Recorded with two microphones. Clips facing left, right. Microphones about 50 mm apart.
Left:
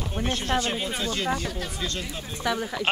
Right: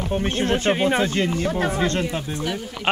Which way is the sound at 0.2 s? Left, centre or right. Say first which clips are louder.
Right 1 dB; right.